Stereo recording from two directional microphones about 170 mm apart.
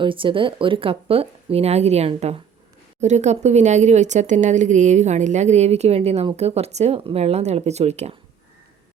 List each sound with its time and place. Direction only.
0.0 s a woman's voice: 30° right (ahead or behind)